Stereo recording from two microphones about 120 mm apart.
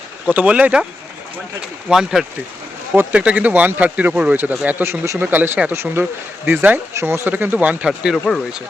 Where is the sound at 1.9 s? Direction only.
5° right (ahead or behind).